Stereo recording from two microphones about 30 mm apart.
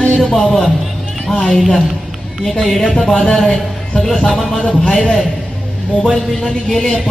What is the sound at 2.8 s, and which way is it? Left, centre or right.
A man's voice, left.